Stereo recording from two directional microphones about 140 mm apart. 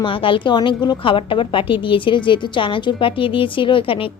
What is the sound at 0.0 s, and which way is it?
A woman's voice, 40° left (ahead or behind).